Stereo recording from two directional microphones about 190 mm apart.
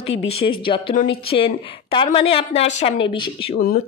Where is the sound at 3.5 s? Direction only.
50° left (ahead or behind).